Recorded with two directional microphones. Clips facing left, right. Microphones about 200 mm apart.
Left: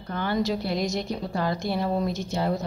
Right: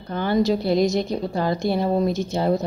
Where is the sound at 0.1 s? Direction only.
25° right (ahead or behind).